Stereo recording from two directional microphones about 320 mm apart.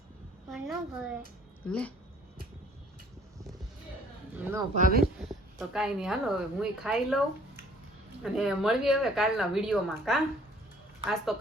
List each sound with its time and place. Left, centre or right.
0.5 s speech: centre
4.4 s speech: centre
4.7 s speech: right
5.1 s a woman's voice: centre
8.2 s speech: centre